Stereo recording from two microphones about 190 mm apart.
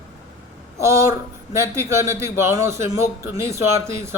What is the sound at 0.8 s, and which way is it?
Speech, 15° right (ahead or behind).